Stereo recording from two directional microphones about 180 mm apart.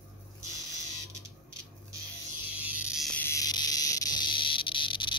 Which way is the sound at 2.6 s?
10° right (ahead or behind).